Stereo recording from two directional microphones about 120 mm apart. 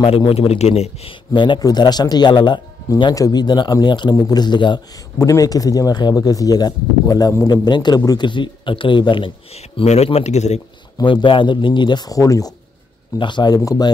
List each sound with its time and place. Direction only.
0.3 s speech: 60° left (ahead or behind)
1.3 s speech: 40° left (ahead or behind)
5.2 s speech: 30° left (ahead or behind); by 9.6 s 45° left (ahead or behind)
9.6 s speech: 65° left (ahead or behind)
11.0 s speech: 40° left (ahead or behind)